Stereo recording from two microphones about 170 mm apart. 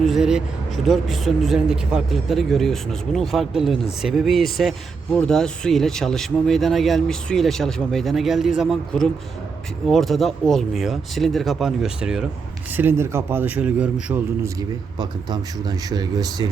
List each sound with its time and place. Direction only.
0.0 s a sound: centre (ahead or behind)
0.9 s a man's voice: centre (ahead or behind)
14.9 s speech: 25° right (ahead or behind)